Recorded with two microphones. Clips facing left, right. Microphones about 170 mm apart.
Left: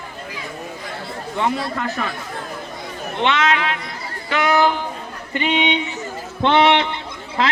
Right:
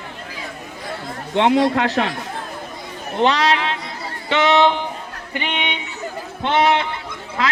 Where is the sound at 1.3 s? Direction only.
85° right.